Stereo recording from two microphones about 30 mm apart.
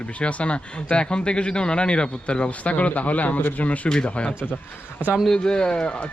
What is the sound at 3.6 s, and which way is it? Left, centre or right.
Speech, left.